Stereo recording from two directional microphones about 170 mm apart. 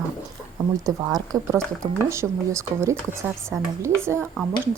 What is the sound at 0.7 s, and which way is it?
A woman's voice, 20° right (ahead or behind).